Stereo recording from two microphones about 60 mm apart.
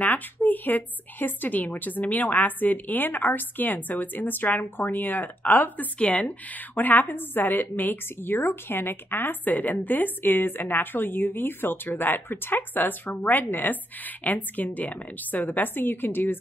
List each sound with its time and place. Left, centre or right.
0.0 s a woman's voice: left